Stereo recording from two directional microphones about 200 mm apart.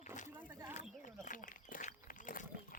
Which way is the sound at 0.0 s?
40° left (ahead or behind).